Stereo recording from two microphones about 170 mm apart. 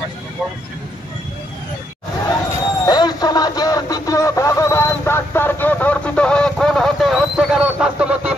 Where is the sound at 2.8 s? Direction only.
25° left (ahead or behind).